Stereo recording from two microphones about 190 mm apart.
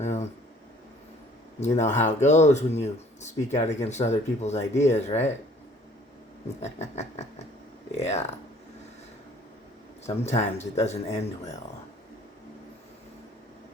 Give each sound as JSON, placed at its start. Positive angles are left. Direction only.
{"t": 0.0, "sound": "a sound", "side_deg": 35}
{"t": 1.6, "sound": "speech", "side_deg": 35}
{"t": 6.6, "sound": "speech", "side_deg": 35}
{"t": 10.2, "sound": "speech", "side_deg": 35}